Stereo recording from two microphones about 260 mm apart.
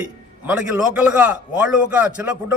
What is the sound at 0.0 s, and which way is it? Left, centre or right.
A man's voice, centre.